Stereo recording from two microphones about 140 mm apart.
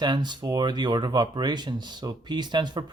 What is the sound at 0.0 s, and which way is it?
Speech, 30° right (ahead or behind).